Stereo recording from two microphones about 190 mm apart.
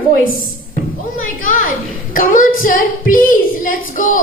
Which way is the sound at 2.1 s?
45° left (ahead or behind).